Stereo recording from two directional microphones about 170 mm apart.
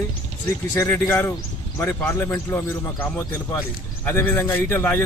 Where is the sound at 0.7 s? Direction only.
15° left (ahead or behind).